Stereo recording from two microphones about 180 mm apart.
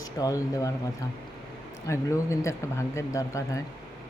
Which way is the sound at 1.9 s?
15° left (ahead or behind).